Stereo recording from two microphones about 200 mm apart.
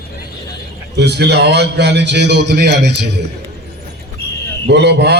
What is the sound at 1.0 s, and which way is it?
A man's voice, 55° right (ahead or behind).